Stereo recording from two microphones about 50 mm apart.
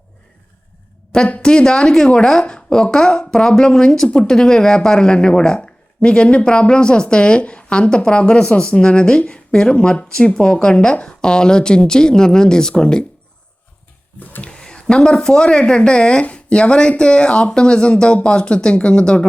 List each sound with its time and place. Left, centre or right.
1.4 s a woman's voice: centre
14.4 s a woman's voice: centre